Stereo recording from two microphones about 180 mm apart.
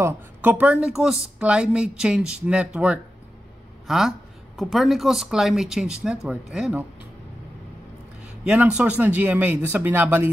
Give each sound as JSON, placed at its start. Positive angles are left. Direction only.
{"t": 0.0, "sound": "speech", "side_deg": -10}
{"t": 8.5, "sound": "speech", "side_deg": -5}